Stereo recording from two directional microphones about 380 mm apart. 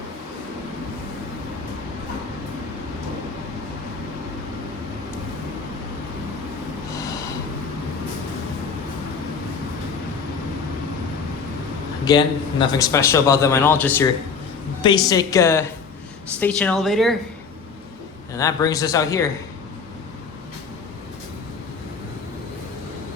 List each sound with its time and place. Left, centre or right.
12.0 s a man's voice: centre
18.3 s a man's voice: centre